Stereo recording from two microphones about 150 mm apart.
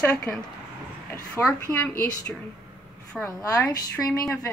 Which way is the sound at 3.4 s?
25° left (ahead or behind).